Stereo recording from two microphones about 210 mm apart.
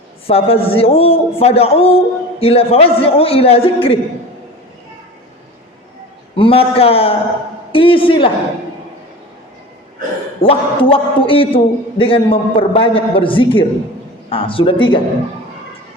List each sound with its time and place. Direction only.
0.3 s a man's voice: 30° left (ahead or behind)
6.3 s a man's voice: 25° left (ahead or behind)
10.4 s a man's voice: 25° left (ahead or behind)